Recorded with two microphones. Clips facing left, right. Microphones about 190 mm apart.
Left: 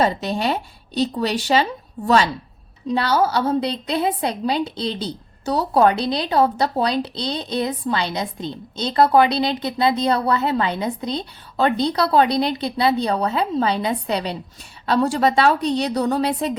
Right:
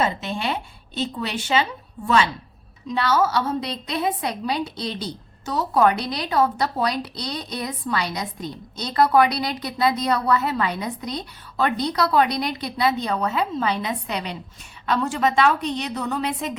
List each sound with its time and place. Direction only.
0.0 s a woman's voice: 40° left (ahead or behind)